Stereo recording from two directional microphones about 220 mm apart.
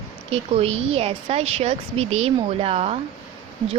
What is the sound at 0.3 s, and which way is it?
Speech, 25° right (ahead or behind).